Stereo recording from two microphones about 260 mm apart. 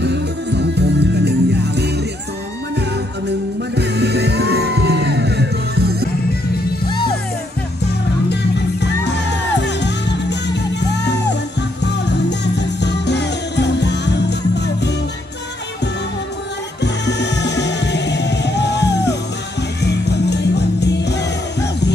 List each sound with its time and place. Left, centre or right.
0.0 s music: right
3.7 s music: right
6.9 s music: centre
7.8 s music: left
16.8 s music: left